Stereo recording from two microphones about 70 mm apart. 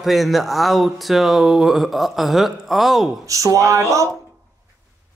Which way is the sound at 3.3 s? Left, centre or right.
Right.